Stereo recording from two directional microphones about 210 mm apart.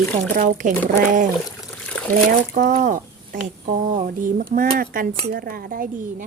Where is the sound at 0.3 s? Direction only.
40° right (ahead or behind).